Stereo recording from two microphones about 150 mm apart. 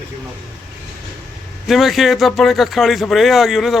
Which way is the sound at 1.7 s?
Centre (ahead or behind).